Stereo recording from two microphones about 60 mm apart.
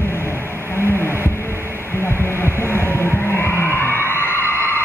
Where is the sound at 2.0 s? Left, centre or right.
Left.